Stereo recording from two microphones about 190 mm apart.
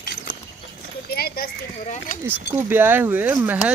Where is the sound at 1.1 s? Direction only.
55° left (ahead or behind).